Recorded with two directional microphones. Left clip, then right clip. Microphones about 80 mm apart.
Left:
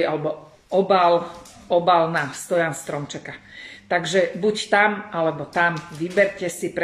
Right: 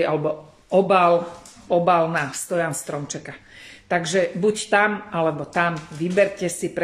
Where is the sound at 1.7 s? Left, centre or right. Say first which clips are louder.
Left 1 dB; centre.